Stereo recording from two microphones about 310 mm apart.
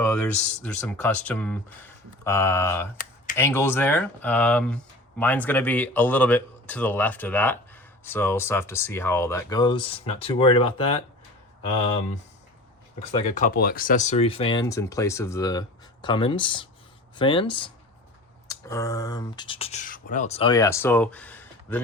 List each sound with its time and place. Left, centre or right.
0.0 s speech: centre